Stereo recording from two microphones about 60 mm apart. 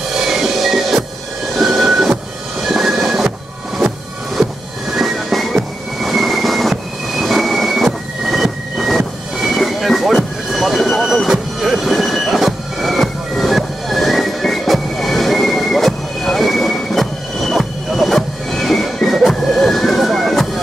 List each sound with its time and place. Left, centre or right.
0.1 s music: centre
1.5 s train: centre
2.7 s music: centre
5.9 s train: centre
19.0 s music: centre